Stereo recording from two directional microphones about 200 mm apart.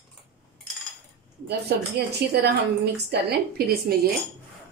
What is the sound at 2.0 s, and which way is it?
A woman's voice, 55° right (ahead or behind).